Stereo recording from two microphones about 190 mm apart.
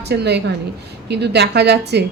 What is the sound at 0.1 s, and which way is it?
Speech, 60° right (ahead or behind).